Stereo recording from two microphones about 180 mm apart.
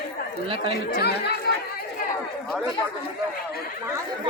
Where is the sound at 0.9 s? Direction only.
65° left (ahead or behind).